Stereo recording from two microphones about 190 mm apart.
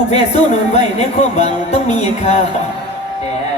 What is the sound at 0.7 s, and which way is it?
Speech, 35° left (ahead or behind).